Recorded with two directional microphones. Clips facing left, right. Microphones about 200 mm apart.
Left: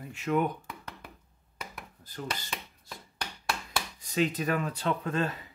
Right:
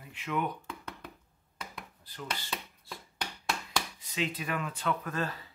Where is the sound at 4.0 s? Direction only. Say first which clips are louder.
Left 6 dB; 45° left (ahead or behind); by 5.4 s 20° left (ahead or behind).